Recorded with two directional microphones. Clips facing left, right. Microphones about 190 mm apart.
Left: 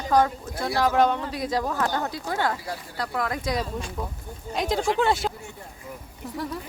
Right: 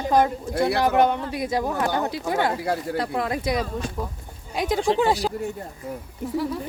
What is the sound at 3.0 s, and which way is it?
Speech, 25° right (ahead or behind).